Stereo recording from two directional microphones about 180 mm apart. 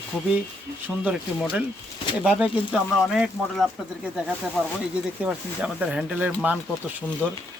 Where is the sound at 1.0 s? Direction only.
5° right (ahead or behind).